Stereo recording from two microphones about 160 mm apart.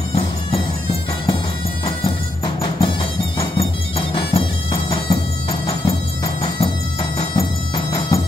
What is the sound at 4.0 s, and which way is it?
Music, 30° left (ahead or behind).